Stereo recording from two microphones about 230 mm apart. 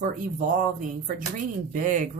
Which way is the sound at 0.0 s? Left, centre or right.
Right.